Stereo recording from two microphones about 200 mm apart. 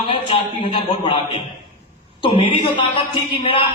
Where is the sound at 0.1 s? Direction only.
25° left (ahead or behind).